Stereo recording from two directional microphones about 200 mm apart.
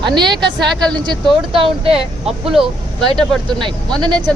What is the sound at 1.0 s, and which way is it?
Speech, 25° right (ahead or behind).